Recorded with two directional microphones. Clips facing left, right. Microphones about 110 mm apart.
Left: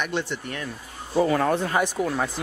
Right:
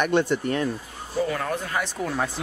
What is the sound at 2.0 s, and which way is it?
Speech, centre (ahead or behind).